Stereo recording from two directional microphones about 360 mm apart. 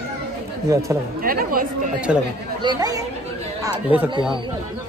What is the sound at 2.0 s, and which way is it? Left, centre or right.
Speech, centre.